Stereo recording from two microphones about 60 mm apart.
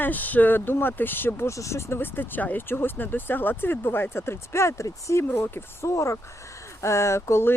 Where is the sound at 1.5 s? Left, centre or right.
Left.